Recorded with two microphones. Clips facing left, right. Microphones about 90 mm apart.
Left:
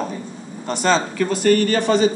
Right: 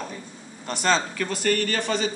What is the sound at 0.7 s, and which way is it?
Speech, 5° left (ahead or behind).